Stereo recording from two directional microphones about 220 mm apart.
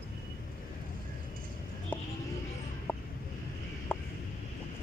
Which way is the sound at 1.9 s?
10° left (ahead or behind).